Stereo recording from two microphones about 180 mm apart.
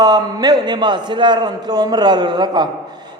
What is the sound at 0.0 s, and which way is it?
A man's voice, 20° right (ahead or behind).